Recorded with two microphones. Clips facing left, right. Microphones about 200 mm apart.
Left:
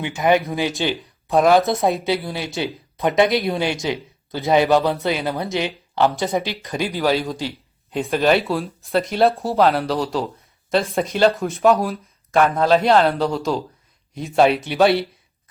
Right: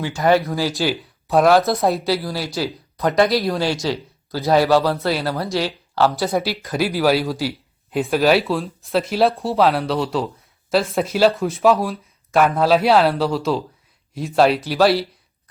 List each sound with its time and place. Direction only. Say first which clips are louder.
0.0 s speech: right 1 dB; 15° left (ahead or behind)
0.7 s speech: right 1 dB; centre (ahead or behind)
2.2 s speech: right 1 dB; 20° left (ahead or behind)
4.4 s speech: right 1 dB; centre (ahead or behind)
4.6 s speech: right 1 dB; 20° left (ahead or behind)
6.3 s speech: right 2 dB; 5° right (ahead or behind)